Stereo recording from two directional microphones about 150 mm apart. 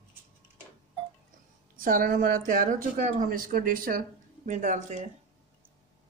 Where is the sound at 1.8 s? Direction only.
65° right (ahead or behind).